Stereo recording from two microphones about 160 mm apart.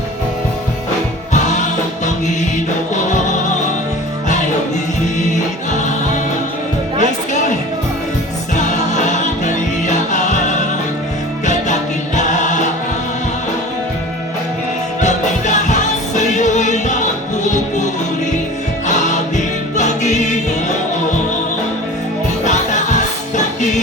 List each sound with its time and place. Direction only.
2.0 s music: 50° left (ahead or behind)
5.2 s music: 50° left (ahead or behind)
7.0 s music: 50° left (ahead or behind)
8.5 s music: 50° left (ahead or behind)
15.0 s music: 45° left (ahead or behind)
18.9 s music: 50° left (ahead or behind)
22.4 s music: 50° left (ahead or behind)